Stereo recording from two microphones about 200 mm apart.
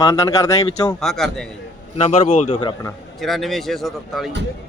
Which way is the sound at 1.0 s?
Centre (ahead or behind).